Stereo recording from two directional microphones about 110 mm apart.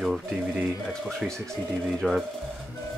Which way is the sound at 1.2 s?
5° right (ahead or behind).